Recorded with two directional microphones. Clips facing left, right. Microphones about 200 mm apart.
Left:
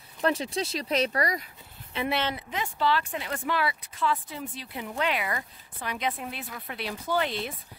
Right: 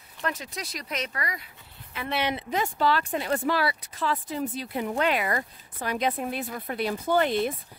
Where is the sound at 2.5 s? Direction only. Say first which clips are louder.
Right 2 dB; 45° right (ahead or behind).